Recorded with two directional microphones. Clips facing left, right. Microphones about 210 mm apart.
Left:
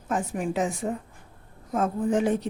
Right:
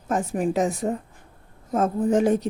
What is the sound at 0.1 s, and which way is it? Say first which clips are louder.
A woman's voice: right 4 dB; 40° right (ahead or behind).